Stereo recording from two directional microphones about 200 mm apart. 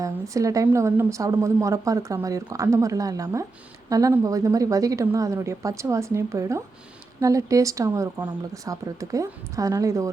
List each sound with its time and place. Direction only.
0.0 s a woman's voice: 15° right (ahead or behind)